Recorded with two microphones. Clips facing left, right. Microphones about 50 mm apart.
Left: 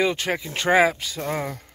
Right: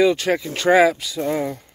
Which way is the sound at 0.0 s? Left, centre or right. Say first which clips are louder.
Right 6 dB; left.